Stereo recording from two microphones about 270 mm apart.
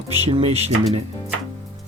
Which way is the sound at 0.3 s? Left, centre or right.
Right.